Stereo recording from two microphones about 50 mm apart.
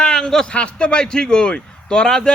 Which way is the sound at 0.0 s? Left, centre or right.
Centre.